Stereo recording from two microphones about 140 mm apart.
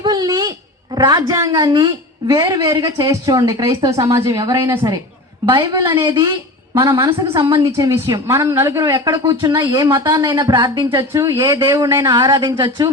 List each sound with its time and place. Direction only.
0.0 s a sound: 30° right (ahead or behind)
0.9 s a woman's voice: 30° right (ahead or behind)
5.5 s a woman's voice: 35° right (ahead or behind)
9.8 s a woman's voice: 25° right (ahead or behind)